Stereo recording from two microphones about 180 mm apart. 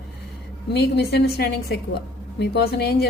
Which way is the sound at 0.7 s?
65° left (ahead or behind).